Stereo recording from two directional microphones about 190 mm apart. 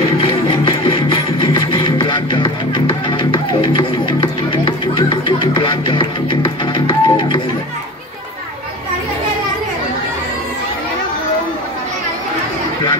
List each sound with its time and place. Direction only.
0.0 s music: 30° left (ahead or behind)